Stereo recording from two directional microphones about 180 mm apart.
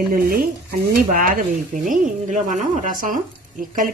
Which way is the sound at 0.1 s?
55° right (ahead or behind).